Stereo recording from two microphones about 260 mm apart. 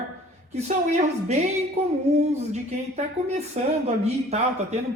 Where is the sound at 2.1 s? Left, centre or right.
Right.